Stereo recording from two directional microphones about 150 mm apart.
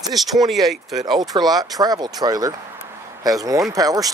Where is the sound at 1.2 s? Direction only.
25° right (ahead or behind).